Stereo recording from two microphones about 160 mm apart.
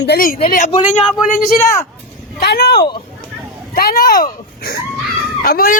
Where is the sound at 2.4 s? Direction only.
90° left.